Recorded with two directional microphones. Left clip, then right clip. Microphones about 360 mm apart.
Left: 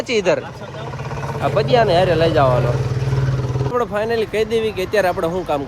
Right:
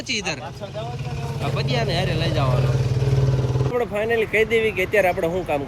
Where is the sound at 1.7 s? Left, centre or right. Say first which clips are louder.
Left 11 dB; centre.